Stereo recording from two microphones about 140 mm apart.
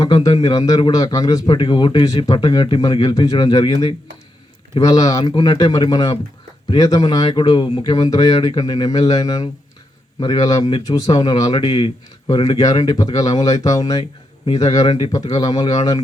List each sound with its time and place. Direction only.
0.0 s speech: 25° left (ahead or behind)
4.7 s speech: 25° left (ahead or behind)